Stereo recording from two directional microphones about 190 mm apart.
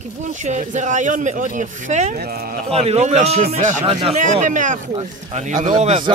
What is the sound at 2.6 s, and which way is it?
Speech, 30° right (ahead or behind).